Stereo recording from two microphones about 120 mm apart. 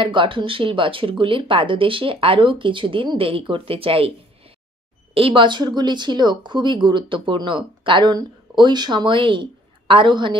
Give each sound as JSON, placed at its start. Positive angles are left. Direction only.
{"t": 0.0, "sound": "speech", "side_deg": -45}
{"t": 5.1, "sound": "speech", "side_deg": -45}